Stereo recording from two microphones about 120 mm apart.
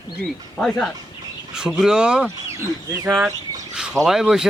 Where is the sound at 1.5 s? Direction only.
5° right (ahead or behind).